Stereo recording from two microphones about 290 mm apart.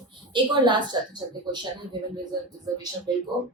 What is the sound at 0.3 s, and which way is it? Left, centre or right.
Speech, centre.